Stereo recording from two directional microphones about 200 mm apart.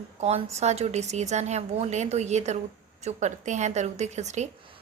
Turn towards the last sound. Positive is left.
turn(degrees=-35)  # may be behind; listen again after turning